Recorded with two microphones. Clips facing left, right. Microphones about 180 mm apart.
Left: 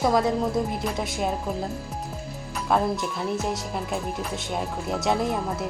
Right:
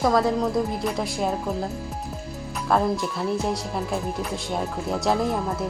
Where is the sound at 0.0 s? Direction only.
Centre (ahead or behind).